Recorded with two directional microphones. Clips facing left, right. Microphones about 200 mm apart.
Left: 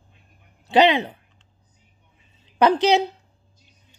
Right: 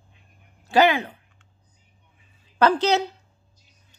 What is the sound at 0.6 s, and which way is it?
Speech, 20° left (ahead or behind).